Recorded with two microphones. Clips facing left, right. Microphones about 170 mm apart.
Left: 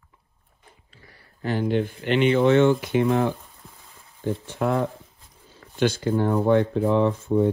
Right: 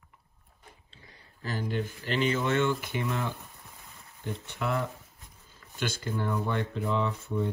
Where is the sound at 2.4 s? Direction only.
55° left (ahead or behind).